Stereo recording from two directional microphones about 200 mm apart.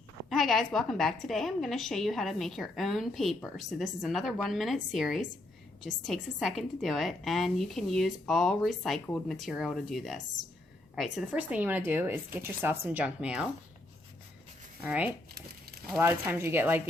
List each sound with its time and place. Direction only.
0.3 s a woman's voice: centre (ahead or behind)
14.8 s speech: 10° right (ahead or behind)
15.4 s crumpling: 50° right (ahead or behind)
16.0 s speech: 10° right (ahead or behind)